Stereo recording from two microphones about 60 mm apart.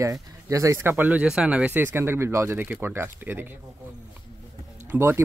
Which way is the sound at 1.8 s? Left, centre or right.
Right.